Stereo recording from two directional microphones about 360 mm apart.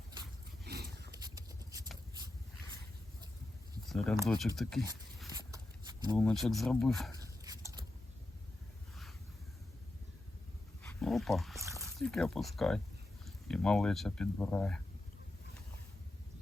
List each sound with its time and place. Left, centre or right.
0.6 s dog: right
3.8 s speech: centre
5.2 s a sound: centre
6.1 s speech: centre
7.4 s biting: centre
10.8 s a sound: centre
12.0 s speech: centre